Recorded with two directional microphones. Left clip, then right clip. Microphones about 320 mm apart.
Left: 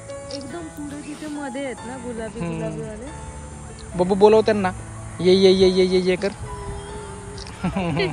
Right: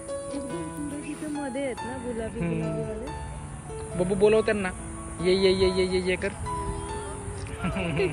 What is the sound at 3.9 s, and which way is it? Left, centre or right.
A man's voice, centre.